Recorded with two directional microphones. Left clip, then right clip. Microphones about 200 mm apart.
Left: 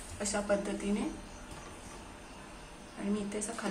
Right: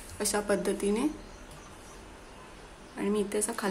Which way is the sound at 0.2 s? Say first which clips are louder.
Right 3 dB; 50° right (ahead or behind).